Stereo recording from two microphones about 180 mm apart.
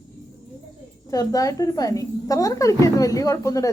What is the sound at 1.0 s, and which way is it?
A woman's voice, 20° left (ahead or behind).